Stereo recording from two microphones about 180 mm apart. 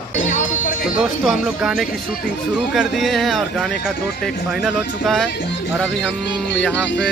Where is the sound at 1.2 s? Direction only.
Centre (ahead or behind).